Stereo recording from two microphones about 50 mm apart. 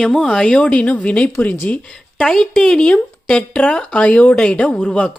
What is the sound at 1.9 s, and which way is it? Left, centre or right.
A woman's voice, centre.